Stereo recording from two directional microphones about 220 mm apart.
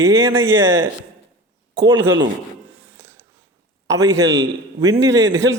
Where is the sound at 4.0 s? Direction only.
15° right (ahead or behind).